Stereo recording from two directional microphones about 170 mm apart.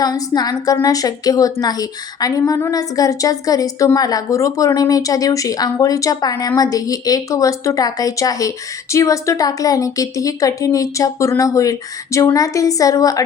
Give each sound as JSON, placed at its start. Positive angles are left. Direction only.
{"t": 0.0, "sound": "speech", "side_deg": 20}